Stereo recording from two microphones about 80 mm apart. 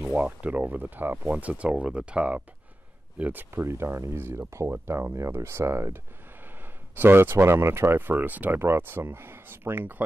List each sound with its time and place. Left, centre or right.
0.0 s speech: centre